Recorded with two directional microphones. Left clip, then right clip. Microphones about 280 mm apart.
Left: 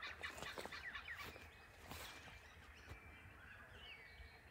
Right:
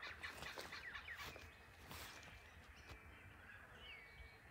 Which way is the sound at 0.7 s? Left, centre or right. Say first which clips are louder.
Left 1 dB; right.